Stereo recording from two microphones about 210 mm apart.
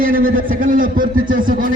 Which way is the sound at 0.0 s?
40° right (ahead or behind).